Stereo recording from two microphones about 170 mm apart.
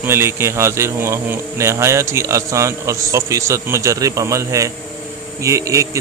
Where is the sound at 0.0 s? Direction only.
15° right (ahead or behind).